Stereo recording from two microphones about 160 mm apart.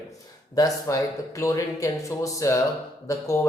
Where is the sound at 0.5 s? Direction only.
20° left (ahead or behind).